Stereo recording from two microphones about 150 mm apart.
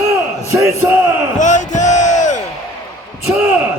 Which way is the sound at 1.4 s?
55° left (ahead or behind).